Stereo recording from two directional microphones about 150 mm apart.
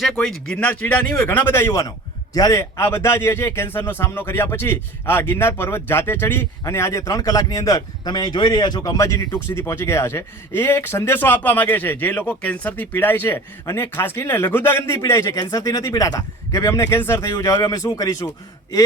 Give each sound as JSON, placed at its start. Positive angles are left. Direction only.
{"t": 0.1, "sound": "a man's voice", "side_deg": 5}